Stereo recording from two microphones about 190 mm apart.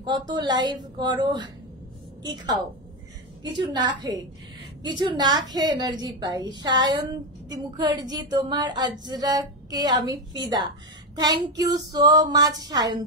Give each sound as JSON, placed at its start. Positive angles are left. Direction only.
{"t": 0.3, "sound": "a woman's voice", "side_deg": -25}